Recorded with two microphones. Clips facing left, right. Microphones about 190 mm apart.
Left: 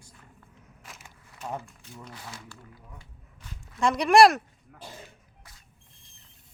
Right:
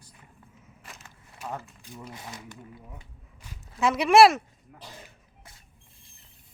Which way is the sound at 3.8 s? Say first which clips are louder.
Even; 5° right (ahead or behind).